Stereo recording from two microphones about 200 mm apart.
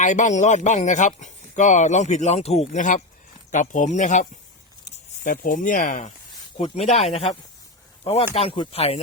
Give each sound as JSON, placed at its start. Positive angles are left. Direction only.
{"t": 0.0, "sound": "speech", "side_deg": 40}